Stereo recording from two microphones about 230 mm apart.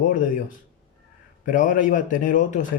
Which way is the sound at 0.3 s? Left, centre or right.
Left.